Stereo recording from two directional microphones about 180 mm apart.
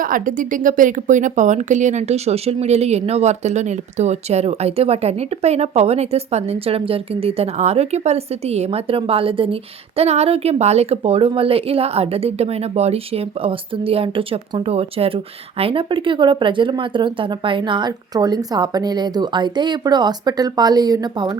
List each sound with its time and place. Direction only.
0.0 s a woman's voice: 50° right (ahead or behind); by 21.3 s 25° right (ahead or behind)